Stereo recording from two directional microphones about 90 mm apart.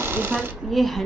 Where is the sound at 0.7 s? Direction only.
Centre (ahead or behind).